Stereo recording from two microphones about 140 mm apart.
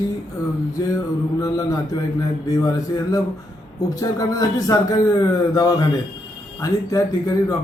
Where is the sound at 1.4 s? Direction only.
25° left (ahead or behind).